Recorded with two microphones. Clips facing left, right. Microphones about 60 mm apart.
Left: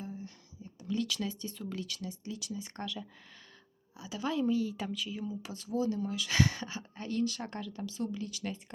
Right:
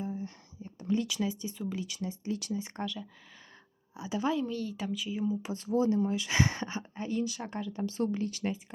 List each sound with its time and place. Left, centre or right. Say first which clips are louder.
0.0 s a sound: right 6 dB; right
0.3 s a sound: right 4 dB; right
0.9 s speech: right 2 dB; centre
2.0 s speech: right 6 dB; right
2.8 s speech: right 3 dB; centre
3.9 s speech: right 6 dB; right
4.4 s speech: left 3 dB; centre
5.0 s speech: right 6 dB; centre
6.9 s speech: left 1 dB; centre
7.9 s speech: right 7 dB; right